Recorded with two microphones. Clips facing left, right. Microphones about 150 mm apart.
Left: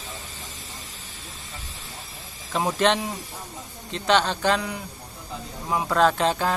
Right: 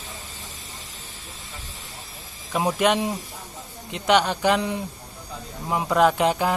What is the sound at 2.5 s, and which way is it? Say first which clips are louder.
Speech: right 1 dB; 10° right (ahead or behind).